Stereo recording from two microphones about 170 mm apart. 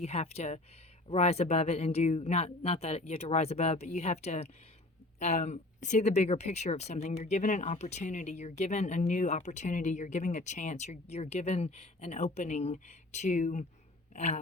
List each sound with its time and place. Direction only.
0.0 s speech: 40° left (ahead or behind)